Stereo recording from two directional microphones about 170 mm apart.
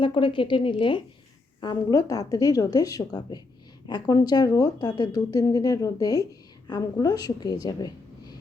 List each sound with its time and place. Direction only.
0.0 s a woman's voice: 30° left (ahead or behind)